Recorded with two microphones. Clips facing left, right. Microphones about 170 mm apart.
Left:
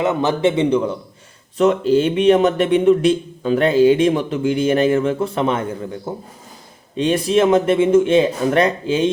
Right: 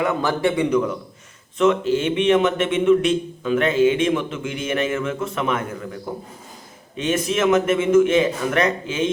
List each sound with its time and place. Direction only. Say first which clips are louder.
0.0 s a man's voice: left 3 dB; 20° left (ahead or behind)